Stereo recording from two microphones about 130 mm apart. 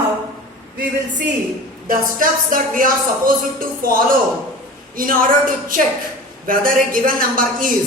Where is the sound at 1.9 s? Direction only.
90° right.